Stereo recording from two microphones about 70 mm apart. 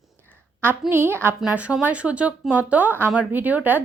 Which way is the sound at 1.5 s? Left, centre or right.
Centre.